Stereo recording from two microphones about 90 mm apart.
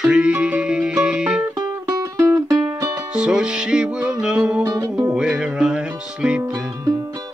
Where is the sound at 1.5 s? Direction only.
40° right (ahead or behind).